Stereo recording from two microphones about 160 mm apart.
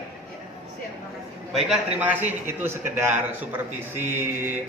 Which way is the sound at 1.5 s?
10° right (ahead or behind).